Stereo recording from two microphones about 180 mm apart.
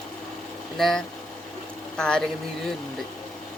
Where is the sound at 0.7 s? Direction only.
Centre (ahead or behind).